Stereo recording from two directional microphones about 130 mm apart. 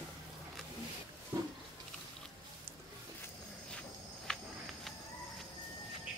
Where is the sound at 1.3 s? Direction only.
25° right (ahead or behind).